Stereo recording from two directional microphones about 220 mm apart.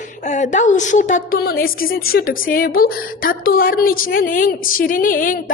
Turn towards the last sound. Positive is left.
turn(degrees=40)  # may be behind; listen again after turning